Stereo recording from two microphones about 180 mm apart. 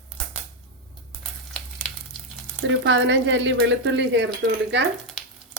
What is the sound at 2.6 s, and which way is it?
Speech, 90° right.